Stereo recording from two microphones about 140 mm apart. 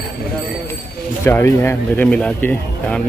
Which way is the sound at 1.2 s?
20° left (ahead or behind).